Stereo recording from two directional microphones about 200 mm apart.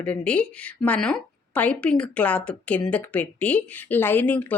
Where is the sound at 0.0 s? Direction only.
5° left (ahead or behind).